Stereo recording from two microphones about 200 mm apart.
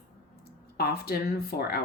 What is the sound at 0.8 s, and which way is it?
Speech, 50° left (ahead or behind).